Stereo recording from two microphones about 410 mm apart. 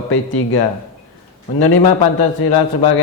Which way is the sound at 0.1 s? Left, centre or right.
Left.